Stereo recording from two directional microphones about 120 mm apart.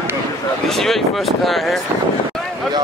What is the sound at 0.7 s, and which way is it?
Speech, centre (ahead or behind).